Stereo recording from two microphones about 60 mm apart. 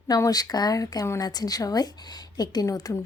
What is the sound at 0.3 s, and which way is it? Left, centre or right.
A woman's voice, left.